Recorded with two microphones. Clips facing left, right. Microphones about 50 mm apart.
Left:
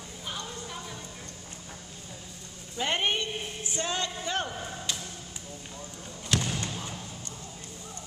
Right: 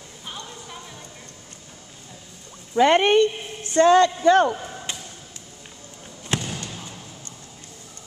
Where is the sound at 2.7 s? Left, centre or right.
Right.